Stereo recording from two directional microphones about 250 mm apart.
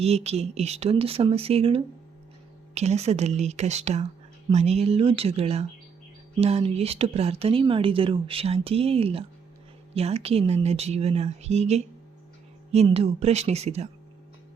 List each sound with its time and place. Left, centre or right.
0.0 s speech: right